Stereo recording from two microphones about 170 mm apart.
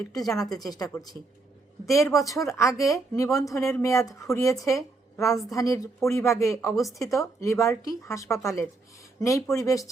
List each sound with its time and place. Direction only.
0.1 s a woman's voice: centre (ahead or behind)
0.6 s speech: 20° left (ahead or behind)